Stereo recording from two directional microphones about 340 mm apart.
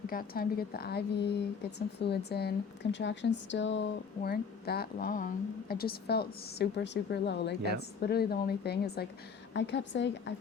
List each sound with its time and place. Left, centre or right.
0.1 s a woman's voice: left